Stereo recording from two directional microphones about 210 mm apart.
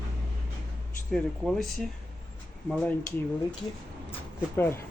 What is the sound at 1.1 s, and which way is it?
Speech, 5° left (ahead or behind).